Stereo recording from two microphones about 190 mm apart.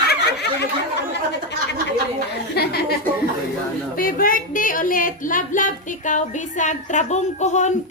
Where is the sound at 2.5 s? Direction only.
55° left (ahead or behind).